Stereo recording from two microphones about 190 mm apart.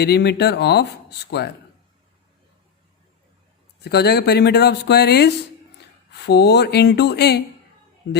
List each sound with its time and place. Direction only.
0.0 s speech: 60° left (ahead or behind)
3.8 s speech: 60° left (ahead or behind)
8.0 s a man's voice: 90° left